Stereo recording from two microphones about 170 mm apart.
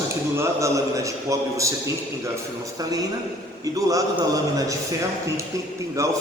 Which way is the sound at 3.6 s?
20° right (ahead or behind).